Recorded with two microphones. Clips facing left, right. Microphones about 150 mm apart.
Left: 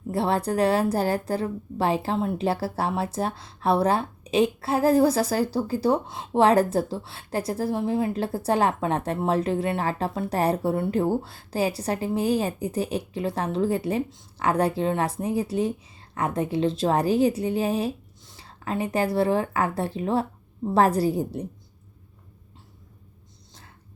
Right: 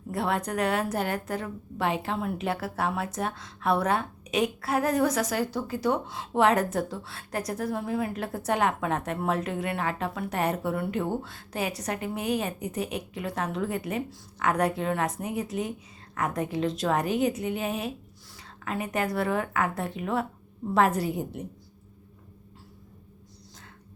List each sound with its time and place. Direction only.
0.1 s a woman's voice: 30° left (ahead or behind)